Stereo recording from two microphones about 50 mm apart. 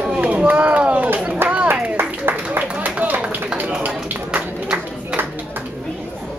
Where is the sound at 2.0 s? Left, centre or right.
Right.